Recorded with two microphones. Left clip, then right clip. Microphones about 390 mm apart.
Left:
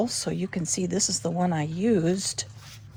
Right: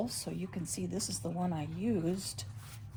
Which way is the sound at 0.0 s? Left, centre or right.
Centre.